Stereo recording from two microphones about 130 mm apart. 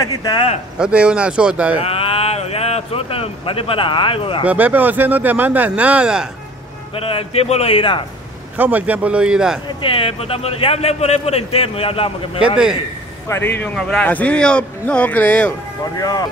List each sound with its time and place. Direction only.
0.0 s speech: 30° left (ahead or behind)
0.7 s speech: 5° right (ahead or behind)
1.8 s speech: 45° left (ahead or behind)
4.5 s speech: 15° right (ahead or behind)
7.0 s a man's voice: 45° left (ahead or behind)
8.5 s speech: 15° right (ahead or behind)
9.8 s a man's voice: 45° left (ahead or behind)
12.4 s a man's voice: 5° right (ahead or behind)
13.3 s a man's voice: 15° left (ahead or behind)
16.0 s speech: 30° left (ahead or behind)